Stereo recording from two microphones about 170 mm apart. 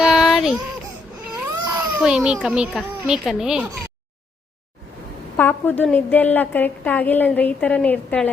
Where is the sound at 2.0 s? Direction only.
5° right (ahead or behind).